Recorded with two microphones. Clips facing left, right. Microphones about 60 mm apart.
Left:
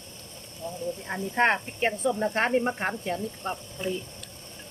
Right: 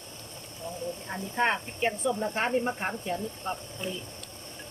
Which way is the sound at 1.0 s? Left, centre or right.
Left.